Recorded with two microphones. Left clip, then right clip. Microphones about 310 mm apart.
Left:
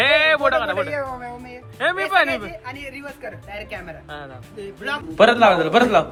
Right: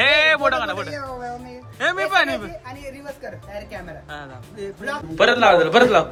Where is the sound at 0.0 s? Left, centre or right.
Centre.